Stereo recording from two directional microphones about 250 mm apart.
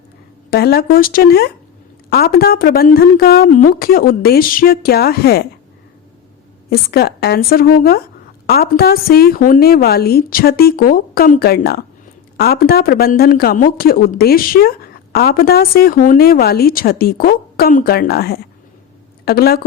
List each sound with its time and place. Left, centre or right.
0.5 s speech: left
6.7 s speech: left